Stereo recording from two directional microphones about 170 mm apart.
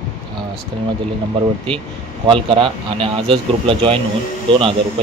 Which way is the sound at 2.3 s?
30° right (ahead or behind).